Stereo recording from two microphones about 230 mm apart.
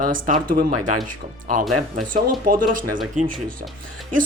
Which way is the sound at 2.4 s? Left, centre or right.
Right.